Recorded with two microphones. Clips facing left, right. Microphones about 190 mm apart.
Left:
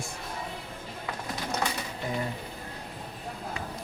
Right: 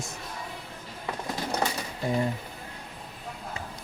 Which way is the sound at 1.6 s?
30° right (ahead or behind).